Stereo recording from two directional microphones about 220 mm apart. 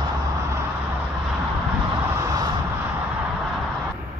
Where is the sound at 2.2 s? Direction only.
15° right (ahead or behind).